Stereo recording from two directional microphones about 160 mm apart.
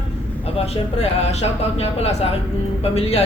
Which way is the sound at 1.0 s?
40° left (ahead or behind).